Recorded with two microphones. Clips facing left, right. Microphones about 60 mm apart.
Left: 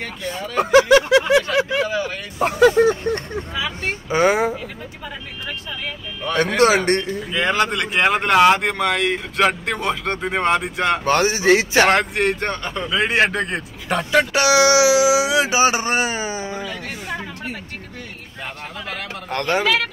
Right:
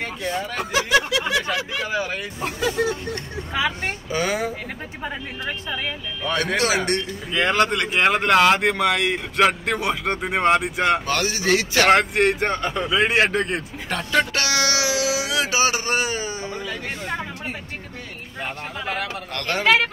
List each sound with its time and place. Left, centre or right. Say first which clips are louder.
0.6 s a sound: left 9 dB; left
1.9 s vehicle: left 2 dB; centre
2.7 s a sound: left 7 dB; left
4.1 s speech: left 7 dB; left
5.0 s speech: right 3 dB; right
6.3 s speech: left 6 dB; left
7.3 s speech: even; centre
11.1 s speech: left 6 dB; left
11.9 s speech: right 1 dB; centre
13.8 s speech: left 4 dB; centre
18.4 s vehicle: right 2 dB; centre
19.3 s speech: left 7 dB; left
19.6 s speech: right 7 dB; right